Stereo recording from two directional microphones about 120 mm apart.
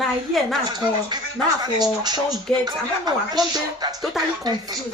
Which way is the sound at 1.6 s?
35° right (ahead or behind).